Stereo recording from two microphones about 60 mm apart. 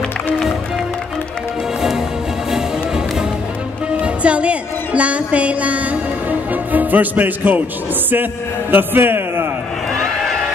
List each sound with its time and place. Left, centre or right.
1.8 s music: centre
4.0 s music: centre
6.5 s a man's voice: right
9.9 s a sound: centre